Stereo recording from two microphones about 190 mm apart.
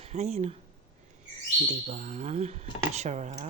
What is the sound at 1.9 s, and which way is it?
A woman's voice, 40° right (ahead or behind).